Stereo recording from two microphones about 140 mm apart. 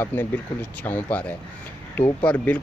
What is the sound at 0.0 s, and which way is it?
Speech, 15° left (ahead or behind).